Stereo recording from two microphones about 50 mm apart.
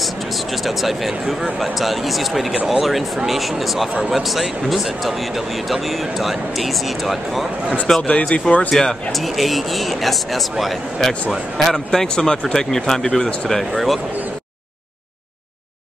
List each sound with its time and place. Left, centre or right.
0.7 s speech: centre
8.1 s speech: left
8.7 s speech: centre